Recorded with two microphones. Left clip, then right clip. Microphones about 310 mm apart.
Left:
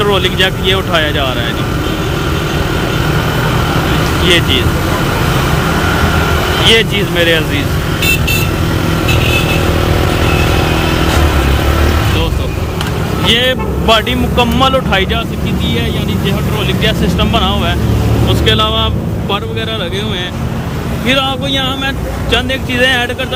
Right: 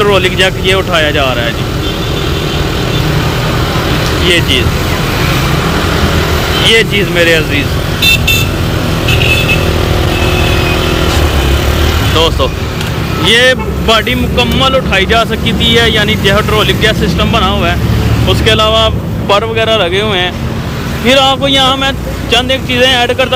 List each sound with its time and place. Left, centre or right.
0.0 s speech: centre
4.3 s speech: centre
6.7 s speech: centre
13.2 s speech: centre